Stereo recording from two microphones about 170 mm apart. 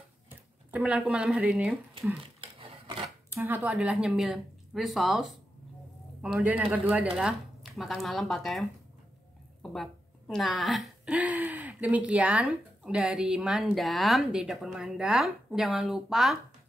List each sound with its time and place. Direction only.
0.7 s speech: 5° right (ahead or behind)
2.4 s a sound: 30° right (ahead or behind)
3.3 s speech: 10° right (ahead or behind)